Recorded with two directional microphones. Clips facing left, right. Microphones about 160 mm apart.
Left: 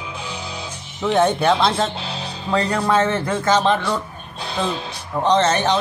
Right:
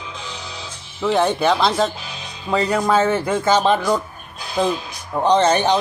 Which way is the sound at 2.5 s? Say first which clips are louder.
Right 1 dB; 10° right (ahead or behind).